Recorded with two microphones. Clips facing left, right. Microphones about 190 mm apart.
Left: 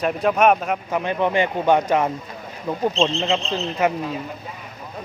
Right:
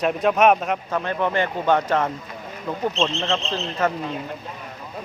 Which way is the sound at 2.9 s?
30° left (ahead or behind).